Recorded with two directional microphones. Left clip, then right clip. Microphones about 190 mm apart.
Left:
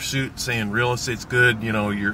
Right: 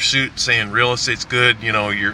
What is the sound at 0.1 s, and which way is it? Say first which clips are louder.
Speech: right 9 dB; 10° left (ahead or behind).